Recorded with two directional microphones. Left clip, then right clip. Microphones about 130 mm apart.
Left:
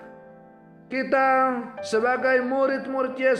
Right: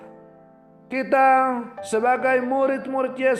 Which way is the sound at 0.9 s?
35° right (ahead or behind).